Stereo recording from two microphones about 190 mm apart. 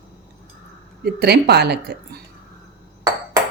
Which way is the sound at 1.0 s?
60° right (ahead or behind).